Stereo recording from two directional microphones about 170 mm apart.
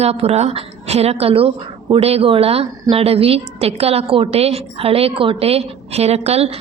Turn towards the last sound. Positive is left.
turn(degrees=-40)  # may be behind; listen again after turning